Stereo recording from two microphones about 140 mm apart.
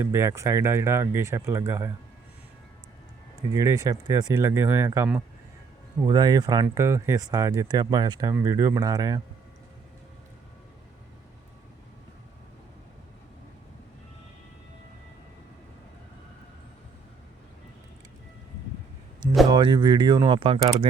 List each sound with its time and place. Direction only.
0.0 s speech: 20° right (ahead or behind)
3.5 s speech: 25° right (ahead or behind)
6.1 s speech: 30° right (ahead or behind)
8.3 s speech: 20° right (ahead or behind)
19.5 s speech: 30° right (ahead or behind)